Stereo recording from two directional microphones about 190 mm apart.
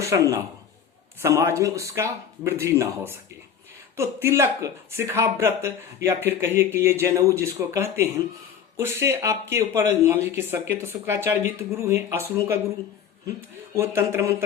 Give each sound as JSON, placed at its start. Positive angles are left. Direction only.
{"t": 0.0, "sound": "a man's voice", "side_deg": -15}
{"t": 13.7, "sound": "speech", "side_deg": -15}